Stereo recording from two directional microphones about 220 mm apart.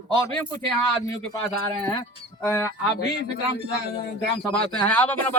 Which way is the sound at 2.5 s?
15° left (ahead or behind).